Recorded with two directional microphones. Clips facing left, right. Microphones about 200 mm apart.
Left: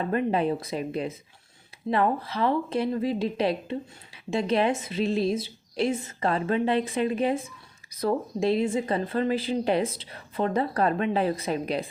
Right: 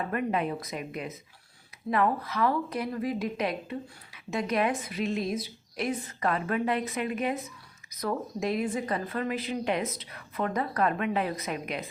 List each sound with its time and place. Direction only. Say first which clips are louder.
0.0 s speech: left 4 dB; 30° left (ahead or behind)